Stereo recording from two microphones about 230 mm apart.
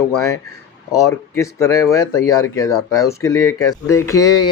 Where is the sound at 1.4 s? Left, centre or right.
Centre.